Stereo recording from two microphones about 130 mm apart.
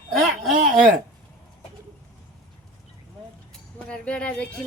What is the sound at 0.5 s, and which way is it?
Speech, 90° right.